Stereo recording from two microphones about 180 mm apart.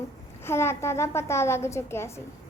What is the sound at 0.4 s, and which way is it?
Child singing, 15° left (ahead or behind).